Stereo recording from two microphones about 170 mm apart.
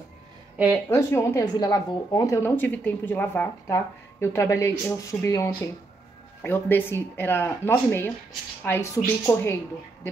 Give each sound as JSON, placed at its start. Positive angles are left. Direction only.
{"t": 0.8, "sound": "a woman's voice", "side_deg": 15}